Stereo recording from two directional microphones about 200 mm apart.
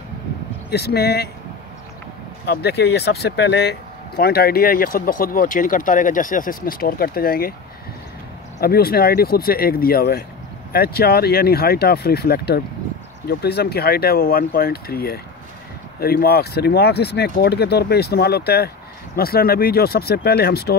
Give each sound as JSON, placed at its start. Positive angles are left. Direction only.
{"t": 0.7, "sound": "speech", "side_deg": 55}
{"t": 2.4, "sound": "speech", "side_deg": 55}
{"t": 8.5, "sound": "speech", "side_deg": 50}